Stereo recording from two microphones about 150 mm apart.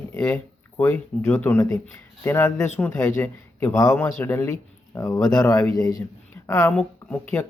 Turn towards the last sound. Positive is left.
turn(degrees=10)  # may be behind; listen again after turning